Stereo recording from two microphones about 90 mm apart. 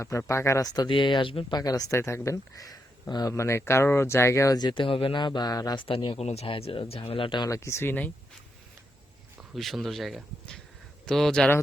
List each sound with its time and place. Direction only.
0.0 s speech: 35° left (ahead or behind)
0.9 s speech: 65° left (ahead or behind)
1.5 s speech: 45° left (ahead or behind)
3.3 s speech: 30° left (ahead or behind)
4.5 s speech: 50° left (ahead or behind)
4.8 s speech: 90° left; by 5.8 s 50° left (ahead or behind)
5.8 s speech: 65° left (ahead or behind); by 7.0 s 90° left
7.1 s speech: 70° left (ahead or behind)
7.5 s speech: 30° left (ahead or behind)
9.6 s speech: centre (ahead or behind)